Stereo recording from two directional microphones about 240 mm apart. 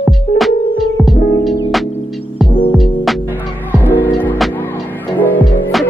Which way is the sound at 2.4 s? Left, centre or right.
Left.